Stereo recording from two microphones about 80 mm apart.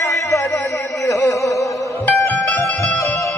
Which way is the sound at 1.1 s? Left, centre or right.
Left.